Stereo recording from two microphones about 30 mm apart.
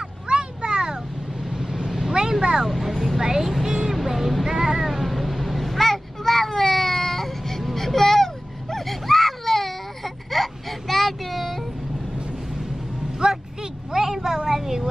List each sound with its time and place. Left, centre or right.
0.3 s a sound: right
1.5 s vehicle: centre
2.9 s vehicle: centre
3.2 s speech: centre
3.6 s vehicle: centre
3.9 s vehicle: centre
4.5 s a sound: centre
7.6 s baby cry: centre
13.2 s vehicle: right
13.9 s a sound: centre